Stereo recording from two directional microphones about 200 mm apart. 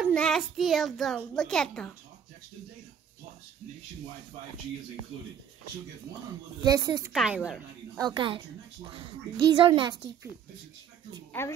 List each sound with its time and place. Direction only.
0.0 s a child's voice: 5° left (ahead or behind)
6.6 s a child's voice: 20° right (ahead or behind)
7.1 s a child's voice: centre (ahead or behind)
8.0 s a child's voice: 25° right (ahead or behind)
9.5 s a child's voice: 20° right (ahead or behind)
11.4 s a woman's voice: 10° left (ahead or behind)